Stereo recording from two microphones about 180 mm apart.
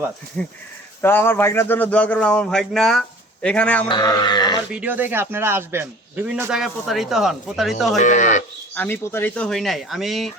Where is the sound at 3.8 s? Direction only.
25° left (ahead or behind).